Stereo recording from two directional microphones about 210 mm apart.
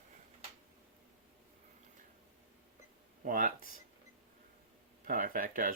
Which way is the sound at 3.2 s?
40° right (ahead or behind).